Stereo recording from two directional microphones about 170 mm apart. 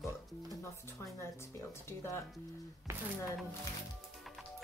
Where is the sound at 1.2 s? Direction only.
15° left (ahead or behind).